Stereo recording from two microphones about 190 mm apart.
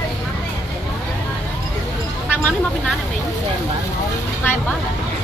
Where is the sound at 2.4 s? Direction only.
5° left (ahead or behind).